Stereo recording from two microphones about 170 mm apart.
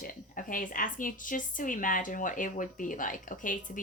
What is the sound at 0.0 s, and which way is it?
A woman's voice, 55° left (ahead or behind).